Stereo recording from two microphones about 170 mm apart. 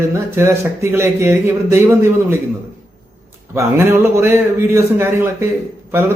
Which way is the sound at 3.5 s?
15° right (ahead or behind).